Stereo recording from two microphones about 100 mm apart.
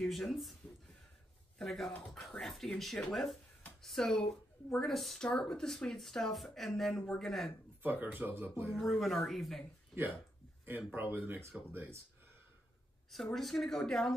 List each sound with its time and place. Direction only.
0.0 s speech: 5° left (ahead or behind)
1.6 s speech: 5° left (ahead or behind)
7.8 s speech: 20° right (ahead or behind)
8.7 s speech: centre (ahead or behind)
11.0 s speech: 20° right (ahead or behind)
13.1 s speech: centre (ahead or behind)